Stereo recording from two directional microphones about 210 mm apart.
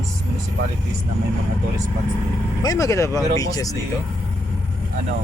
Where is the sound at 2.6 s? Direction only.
15° left (ahead or behind).